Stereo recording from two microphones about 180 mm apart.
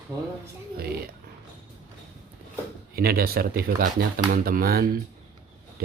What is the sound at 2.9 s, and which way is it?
Speech, 55° right (ahead or behind).